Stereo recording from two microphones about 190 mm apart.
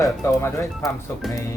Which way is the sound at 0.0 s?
15° left (ahead or behind).